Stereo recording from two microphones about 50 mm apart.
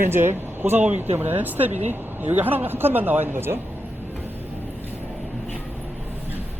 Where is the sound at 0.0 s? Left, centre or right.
Right.